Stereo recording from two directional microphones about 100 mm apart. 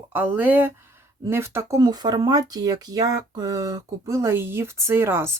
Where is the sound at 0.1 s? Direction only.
20° right (ahead or behind).